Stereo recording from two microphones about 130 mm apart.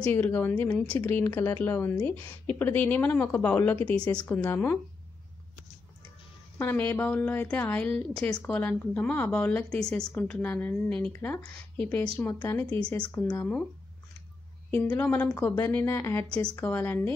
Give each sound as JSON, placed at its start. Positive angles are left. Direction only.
{"t": 0.0, "sound": "a woman's voice", "side_deg": 15}
{"t": 6.6, "sound": "a woman's voice", "side_deg": 15}
{"t": 12.6, "sound": "a woman's voice", "side_deg": 10}
{"t": 14.7, "sound": "a woman's voice", "side_deg": 15}
{"t": 16.3, "sound": "a woman's voice", "side_deg": 10}